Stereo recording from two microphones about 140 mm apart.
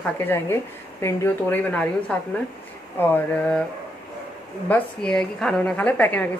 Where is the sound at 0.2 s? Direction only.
15° left (ahead or behind).